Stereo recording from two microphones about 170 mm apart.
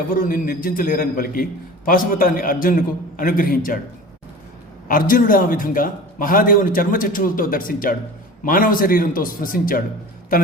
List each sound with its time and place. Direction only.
0.1 s a man's voice: 55° left (ahead or behind)
4.9 s a man's voice: 55° left (ahead or behind)